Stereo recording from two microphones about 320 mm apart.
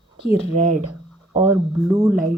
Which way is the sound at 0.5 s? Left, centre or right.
Right.